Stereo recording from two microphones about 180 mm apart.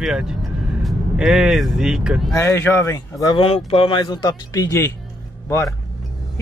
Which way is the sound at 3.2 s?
30° left (ahead or behind).